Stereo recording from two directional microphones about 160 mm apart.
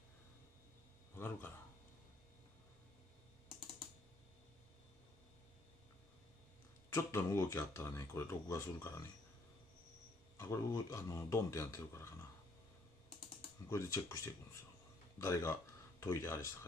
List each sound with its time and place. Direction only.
1.1 s speech: 15° left (ahead or behind)
6.9 s speech: 20° left (ahead or behind)
10.3 s speech: 15° left (ahead or behind)
13.7 s speech: 20° left (ahead or behind)